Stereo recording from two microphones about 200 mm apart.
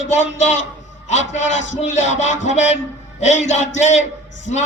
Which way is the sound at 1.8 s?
35° left (ahead or behind).